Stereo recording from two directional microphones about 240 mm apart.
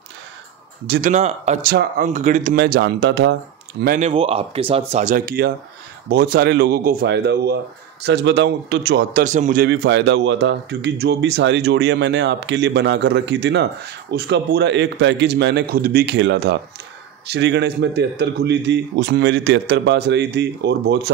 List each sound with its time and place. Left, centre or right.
0.8 s speech: right
1.1 s speech: right
3.8 s speech: right
4.1 s speech: right
9.2 s speech: right
9.7 s speech: right